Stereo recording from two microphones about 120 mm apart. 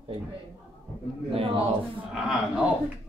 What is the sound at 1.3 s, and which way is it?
Speech, 50° right (ahead or behind).